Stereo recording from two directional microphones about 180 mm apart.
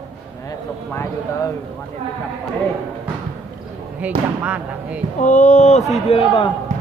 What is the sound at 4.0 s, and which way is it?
Speech, 10° right (ahead or behind).